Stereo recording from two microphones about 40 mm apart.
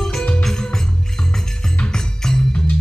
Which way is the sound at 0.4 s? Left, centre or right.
Centre.